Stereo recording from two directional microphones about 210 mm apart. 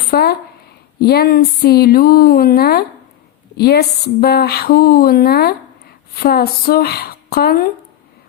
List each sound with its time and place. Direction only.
0.1 s speech: 50° left (ahead or behind)